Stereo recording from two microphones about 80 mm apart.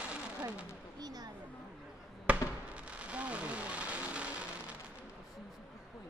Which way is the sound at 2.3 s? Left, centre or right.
Centre.